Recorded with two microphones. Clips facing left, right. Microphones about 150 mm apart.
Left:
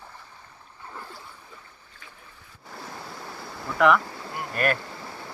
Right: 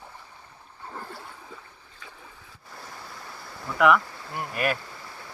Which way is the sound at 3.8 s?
5° right (ahead or behind).